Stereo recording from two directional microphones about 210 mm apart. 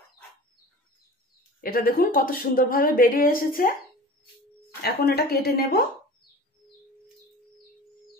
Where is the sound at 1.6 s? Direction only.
45° left (ahead or behind).